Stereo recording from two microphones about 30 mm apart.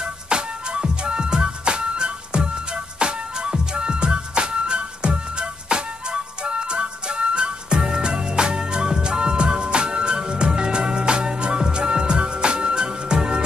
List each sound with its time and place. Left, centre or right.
0.0 s music: right